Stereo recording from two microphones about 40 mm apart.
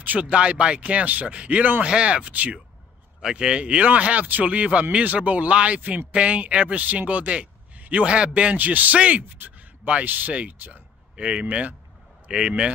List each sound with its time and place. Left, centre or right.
0.0 s speech: right
0.3 s speech: right
3.2 s speech: centre
5.8 s speech: right
6.1 s speech: right
8.5 s speech: right
8.9 s speech: right
9.3 s a sound: right
10.0 s speech: right
11.1 s speech: right